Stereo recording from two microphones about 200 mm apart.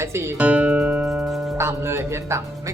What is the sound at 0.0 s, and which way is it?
Music, 15° right (ahead or behind).